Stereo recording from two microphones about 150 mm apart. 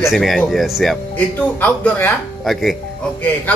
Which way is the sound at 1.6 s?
10° left (ahead or behind).